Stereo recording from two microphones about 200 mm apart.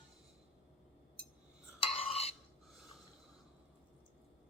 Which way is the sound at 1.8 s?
30° left (ahead or behind).